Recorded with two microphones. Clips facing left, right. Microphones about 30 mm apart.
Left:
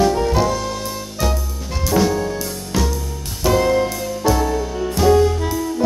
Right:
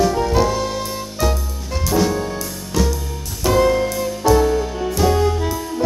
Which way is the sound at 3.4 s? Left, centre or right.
Centre.